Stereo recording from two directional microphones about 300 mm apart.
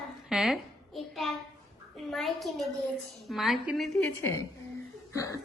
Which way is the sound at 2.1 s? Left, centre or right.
Centre.